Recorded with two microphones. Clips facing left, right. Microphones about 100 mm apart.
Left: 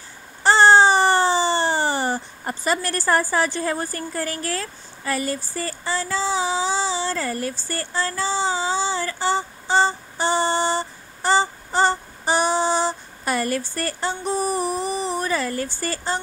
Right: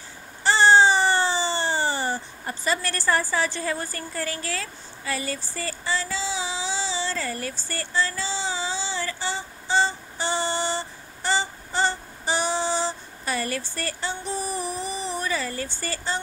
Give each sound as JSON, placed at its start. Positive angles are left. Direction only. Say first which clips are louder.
{"t": 0.4, "sound": "baby cry", "louder": "left 3 dB", "side_deg": 50}
{"t": 4.5, "sound": "a sound", "louder": "left 4 dB", "side_deg": 40}
{"t": 7.8, "sound": "female singing", "louder": "left 1 dB", "side_deg": 45}
{"t": 9.8, "sound": "child singing", "louder": "left 4 dB", "side_deg": 40}